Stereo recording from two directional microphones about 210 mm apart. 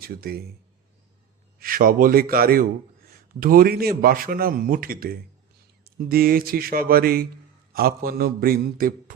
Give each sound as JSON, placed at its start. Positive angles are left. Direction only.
{"t": 0.0, "sound": "speech", "side_deg": -45}
{"t": 1.5, "sound": "a man's voice", "side_deg": -40}